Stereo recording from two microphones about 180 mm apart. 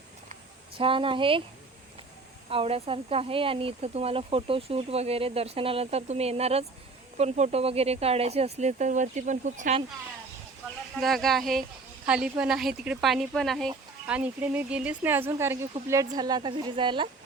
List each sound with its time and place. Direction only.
0.8 s a woman's voice: 30° right (ahead or behind)
2.5 s speech: 30° right (ahead or behind)
11.0 s a woman's voice: centre (ahead or behind); by 17.1 s 25° right (ahead or behind)